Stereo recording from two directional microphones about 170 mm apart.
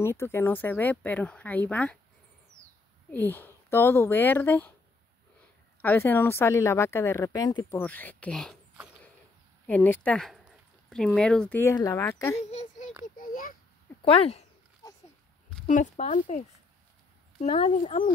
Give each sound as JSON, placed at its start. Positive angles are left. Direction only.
{"t": 0.0, "sound": "speech", "side_deg": 15}
{"t": 3.1, "sound": "speech", "side_deg": 10}
{"t": 5.8, "sound": "speech", "side_deg": 10}
{"t": 7.8, "sound": "speech", "side_deg": 10}
{"t": 11.7, "sound": "speech", "side_deg": 20}
{"t": 12.4, "sound": "a sound", "side_deg": 40}
{"t": 13.0, "sound": "a sound", "side_deg": 55}
{"t": 14.0, "sound": "speech", "side_deg": 35}
{"t": 15.6, "sound": "speech", "side_deg": 45}